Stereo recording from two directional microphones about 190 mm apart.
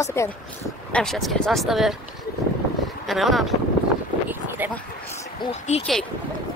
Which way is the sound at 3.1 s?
Centre (ahead or behind).